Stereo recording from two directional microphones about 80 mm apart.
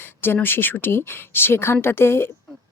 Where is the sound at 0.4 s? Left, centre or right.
Left.